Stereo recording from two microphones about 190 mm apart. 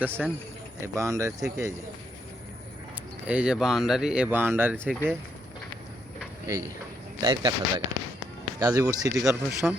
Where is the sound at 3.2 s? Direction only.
5° right (ahead or behind).